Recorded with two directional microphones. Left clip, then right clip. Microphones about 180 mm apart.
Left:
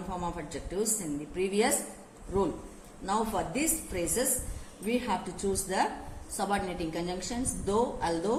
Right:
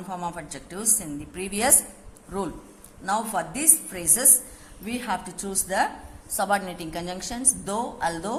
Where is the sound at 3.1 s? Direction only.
55° right (ahead or behind).